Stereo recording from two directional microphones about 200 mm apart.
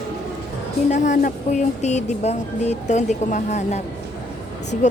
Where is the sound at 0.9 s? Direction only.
35° left (ahead or behind).